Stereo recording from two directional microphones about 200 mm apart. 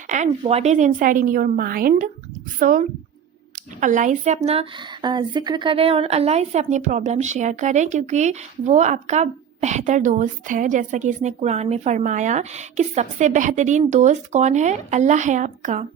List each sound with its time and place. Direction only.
0.1 s a woman's voice: 35° right (ahead or behind)